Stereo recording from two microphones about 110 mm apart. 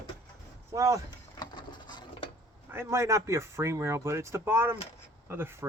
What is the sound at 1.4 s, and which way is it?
Patter, 45° left (ahead or behind).